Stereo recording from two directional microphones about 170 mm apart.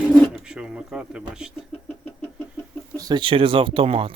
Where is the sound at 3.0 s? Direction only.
25° right (ahead or behind).